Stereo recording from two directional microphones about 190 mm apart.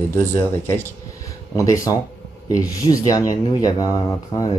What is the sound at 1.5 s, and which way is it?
Speech, 15° left (ahead or behind).